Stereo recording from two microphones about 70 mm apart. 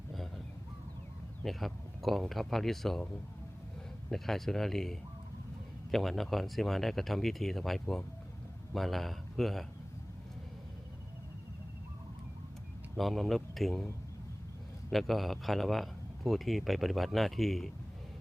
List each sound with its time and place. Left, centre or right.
0.1 s a sound: centre
1.5 s speech: centre
4.1 s speech: centre
13.0 s speech: centre
14.8 s speech: centre